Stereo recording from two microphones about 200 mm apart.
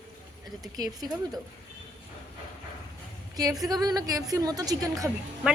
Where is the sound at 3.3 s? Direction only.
20° right (ahead or behind).